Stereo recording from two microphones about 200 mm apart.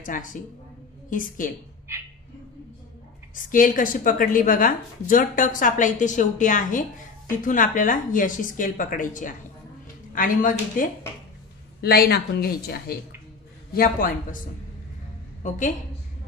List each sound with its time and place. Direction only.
0.0 s a woman's voice: 40° left (ahead or behind)
1.9 s bird: 10° right (ahead or behind)
3.4 s a woman's voice: 40° left (ahead or behind)
15.4 s a woman's voice: 40° left (ahead or behind)